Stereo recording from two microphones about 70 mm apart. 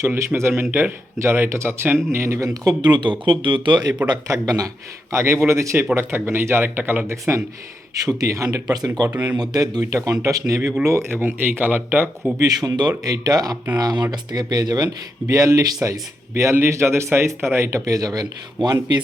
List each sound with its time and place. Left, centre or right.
0.0 s speech: right
2.5 s speech: right
4.3 s speech: right
5.1 s speech: right
7.9 s speech: right
8.6 s speech: right
9.9 s speech: right
11.1 s speech: right
12.4 s speech: right
13.7 s speech: right
15.3 s speech: right